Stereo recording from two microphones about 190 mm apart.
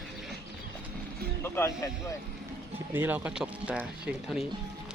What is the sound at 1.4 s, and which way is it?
Speech, 15° left (ahead or behind).